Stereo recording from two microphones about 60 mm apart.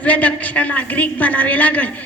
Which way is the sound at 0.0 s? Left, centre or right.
Left.